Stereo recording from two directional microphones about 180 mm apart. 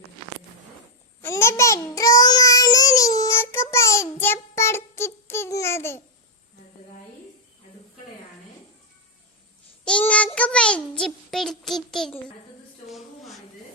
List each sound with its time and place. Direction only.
1.2 s child singing: 15° left (ahead or behind)
9.8 s child singing: 5° left (ahead or behind)
12.9 s a sound: centre (ahead or behind)